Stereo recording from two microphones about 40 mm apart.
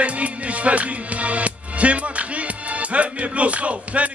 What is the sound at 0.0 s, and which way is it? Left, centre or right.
Music, right.